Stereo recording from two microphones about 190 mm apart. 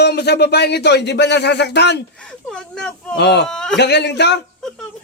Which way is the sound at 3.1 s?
60° left (ahead or behind).